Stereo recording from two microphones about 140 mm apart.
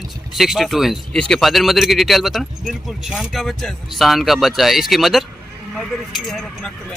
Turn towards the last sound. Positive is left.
turn(degrees=5)  # may be behind; listen again after turning